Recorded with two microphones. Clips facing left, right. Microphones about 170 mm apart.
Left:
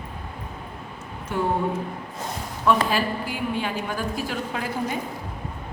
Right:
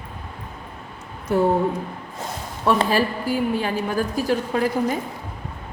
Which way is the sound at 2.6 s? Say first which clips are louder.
Right 2 dB; 40° right (ahead or behind).